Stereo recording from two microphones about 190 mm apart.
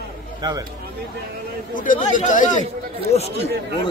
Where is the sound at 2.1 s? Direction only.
40° left (ahead or behind).